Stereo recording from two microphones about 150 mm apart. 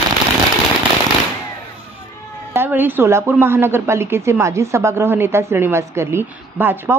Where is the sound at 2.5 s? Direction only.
15° right (ahead or behind).